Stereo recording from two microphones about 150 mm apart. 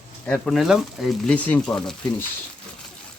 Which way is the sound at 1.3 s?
10° left (ahead or behind).